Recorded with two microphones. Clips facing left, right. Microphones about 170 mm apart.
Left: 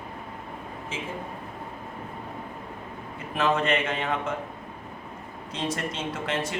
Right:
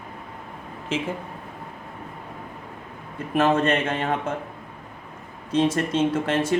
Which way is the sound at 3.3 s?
45° right (ahead or behind).